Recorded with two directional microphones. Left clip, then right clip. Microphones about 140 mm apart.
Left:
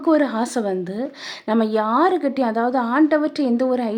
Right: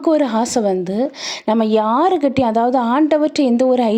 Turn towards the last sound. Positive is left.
turn(degrees=-30)  # may be behind; listen again after turning